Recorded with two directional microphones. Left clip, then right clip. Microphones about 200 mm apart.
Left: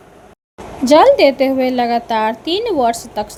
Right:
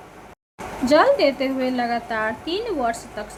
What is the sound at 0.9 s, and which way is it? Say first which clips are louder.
A woman's voice: left 7 dB; 25° left (ahead or behind).